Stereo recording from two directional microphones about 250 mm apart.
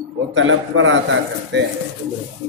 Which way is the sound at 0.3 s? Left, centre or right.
Right.